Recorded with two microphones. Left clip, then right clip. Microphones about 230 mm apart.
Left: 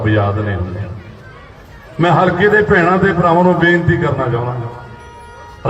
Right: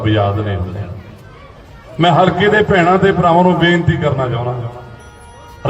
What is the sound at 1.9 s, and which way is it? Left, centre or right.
A man's voice, right.